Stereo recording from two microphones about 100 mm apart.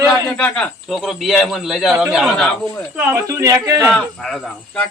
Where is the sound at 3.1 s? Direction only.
30° right (ahead or behind).